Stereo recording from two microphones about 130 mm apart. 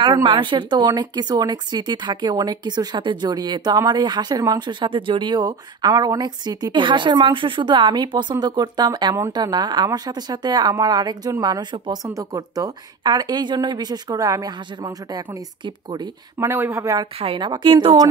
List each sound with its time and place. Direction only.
0.0 s speech: 35° right (ahead or behind)
16.4 s speech: 20° right (ahead or behind)
17.2 s a woman's voice: 45° right (ahead or behind)